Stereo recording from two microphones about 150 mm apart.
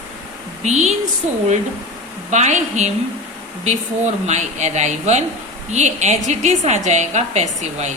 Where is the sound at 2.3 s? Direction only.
50° right (ahead or behind).